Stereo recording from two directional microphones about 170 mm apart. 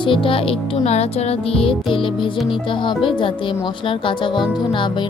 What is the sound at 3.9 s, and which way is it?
Speech, 30° left (ahead or behind).